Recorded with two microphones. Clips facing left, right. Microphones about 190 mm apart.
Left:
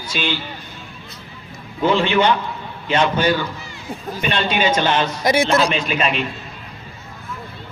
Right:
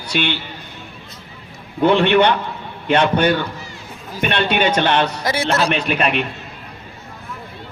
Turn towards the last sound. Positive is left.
turn(degrees=-60)  # may be behind; listen again after turning